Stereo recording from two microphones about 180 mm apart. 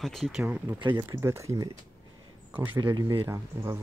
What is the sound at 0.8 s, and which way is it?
Speech, 25° right (ahead or behind).